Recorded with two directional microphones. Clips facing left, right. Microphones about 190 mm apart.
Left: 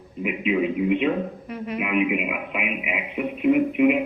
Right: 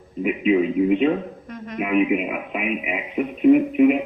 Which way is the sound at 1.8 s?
40° right (ahead or behind).